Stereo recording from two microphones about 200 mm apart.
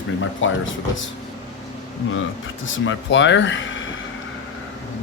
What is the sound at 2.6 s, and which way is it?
Speech, 70° left (ahead or behind).